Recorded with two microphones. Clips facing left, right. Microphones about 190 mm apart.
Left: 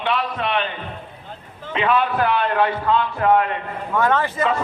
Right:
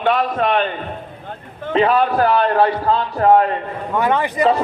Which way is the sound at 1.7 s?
40° right (ahead or behind).